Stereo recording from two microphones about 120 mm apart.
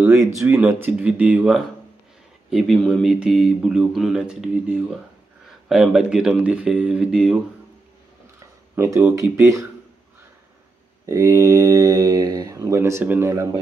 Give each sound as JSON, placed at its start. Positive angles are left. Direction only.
{"t": 0.0, "sound": "speech", "side_deg": -20}
{"t": 8.7, "sound": "speech", "side_deg": -20}
{"t": 11.1, "sound": "speech", "side_deg": -25}